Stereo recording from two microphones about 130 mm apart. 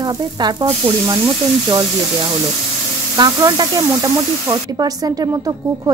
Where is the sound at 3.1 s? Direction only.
30° right (ahead or behind).